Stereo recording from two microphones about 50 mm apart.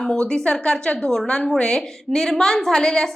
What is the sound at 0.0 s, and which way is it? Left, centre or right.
A woman's voice, centre.